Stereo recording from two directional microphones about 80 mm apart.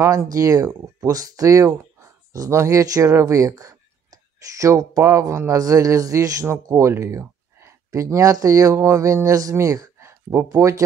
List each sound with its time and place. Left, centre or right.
0.0 s speech: right